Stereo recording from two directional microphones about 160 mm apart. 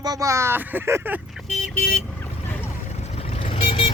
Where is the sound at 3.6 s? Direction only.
35° left (ahead or behind).